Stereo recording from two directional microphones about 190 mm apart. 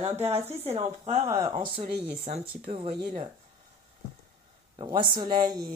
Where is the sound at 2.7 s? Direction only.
40° right (ahead or behind).